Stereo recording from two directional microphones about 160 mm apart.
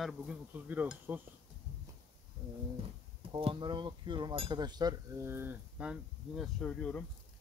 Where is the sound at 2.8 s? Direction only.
35° right (ahead or behind); by 7.0 s 5° left (ahead or behind).